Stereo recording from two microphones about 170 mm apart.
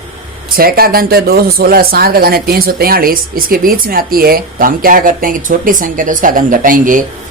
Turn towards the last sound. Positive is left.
turn(degrees=-50)  # may be behind; listen again after turning